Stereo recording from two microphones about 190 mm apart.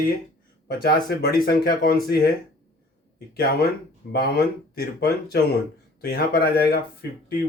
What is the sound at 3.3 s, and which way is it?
Speech, 55° left (ahead or behind).